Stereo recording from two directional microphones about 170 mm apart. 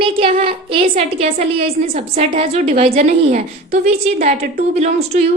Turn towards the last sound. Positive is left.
turn(degrees=-40)  # may be behind; listen again after turning